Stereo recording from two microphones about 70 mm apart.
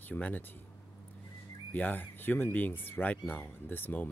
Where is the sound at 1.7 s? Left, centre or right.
Left.